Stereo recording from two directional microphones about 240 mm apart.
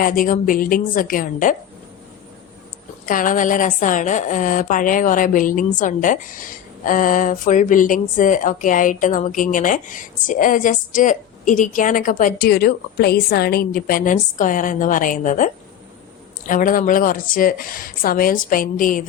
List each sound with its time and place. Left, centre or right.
0.0 s a woman's voice: left
3.1 s a woman's voice: left
16.5 s a woman's voice: left